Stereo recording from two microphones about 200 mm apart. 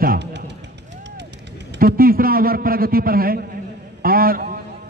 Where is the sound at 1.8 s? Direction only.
45° right (ahead or behind).